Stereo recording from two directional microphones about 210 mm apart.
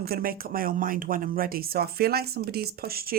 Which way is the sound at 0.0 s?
45° right (ahead or behind).